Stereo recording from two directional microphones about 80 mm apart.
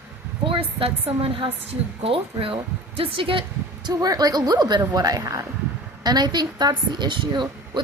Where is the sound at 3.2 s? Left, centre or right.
Right.